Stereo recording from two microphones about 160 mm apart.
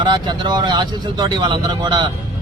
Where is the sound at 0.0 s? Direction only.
30° right (ahead or behind).